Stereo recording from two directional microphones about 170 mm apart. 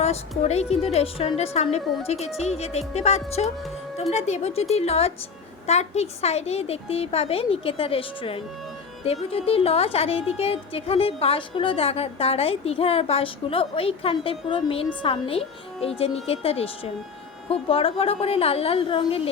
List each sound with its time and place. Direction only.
0.0 s speech: 40° left (ahead or behind)